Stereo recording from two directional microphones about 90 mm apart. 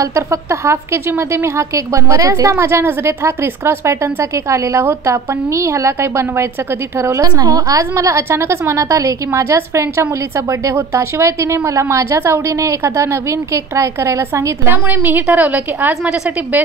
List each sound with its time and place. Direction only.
0.0 s a woman's voice: 35° right (ahead or behind); by 16.6 s 20° right (ahead or behind)